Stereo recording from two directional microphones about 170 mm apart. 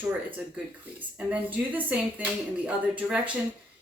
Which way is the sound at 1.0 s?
10° right (ahead or behind).